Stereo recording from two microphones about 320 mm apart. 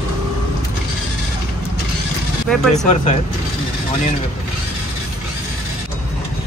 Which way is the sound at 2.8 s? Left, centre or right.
Left.